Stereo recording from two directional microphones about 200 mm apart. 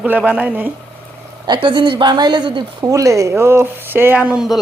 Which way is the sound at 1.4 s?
20° right (ahead or behind).